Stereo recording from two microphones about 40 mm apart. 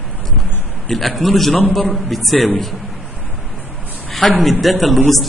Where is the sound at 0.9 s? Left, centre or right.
Centre.